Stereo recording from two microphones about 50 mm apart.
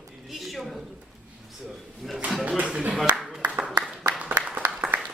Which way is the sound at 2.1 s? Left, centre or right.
Centre.